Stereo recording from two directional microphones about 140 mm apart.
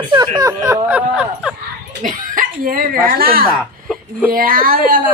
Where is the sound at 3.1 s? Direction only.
90° right.